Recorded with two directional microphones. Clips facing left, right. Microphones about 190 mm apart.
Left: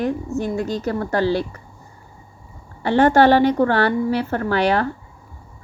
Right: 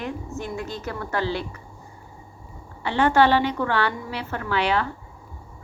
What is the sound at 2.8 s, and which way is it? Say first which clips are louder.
A woman's voice: left 5 dB; 45° left (ahead or behind).